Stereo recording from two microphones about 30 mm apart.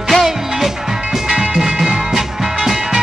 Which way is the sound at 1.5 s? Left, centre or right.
Centre.